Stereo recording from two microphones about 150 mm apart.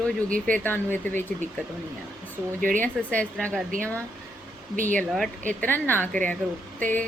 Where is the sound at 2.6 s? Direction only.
65° right (ahead or behind).